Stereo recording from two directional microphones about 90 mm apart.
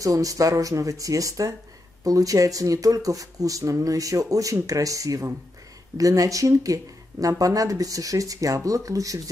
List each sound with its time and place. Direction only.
0.0 s speech: 40° right (ahead or behind)